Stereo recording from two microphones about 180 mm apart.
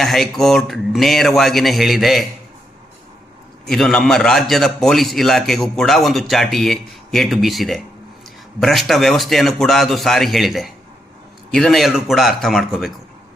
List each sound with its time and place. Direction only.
0.0 s a man's voice: centre (ahead or behind)
3.7 s a man's voice: 5° left (ahead or behind)